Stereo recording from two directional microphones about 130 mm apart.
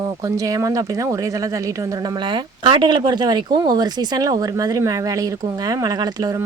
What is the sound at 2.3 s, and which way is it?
Speech, 40° right (ahead or behind).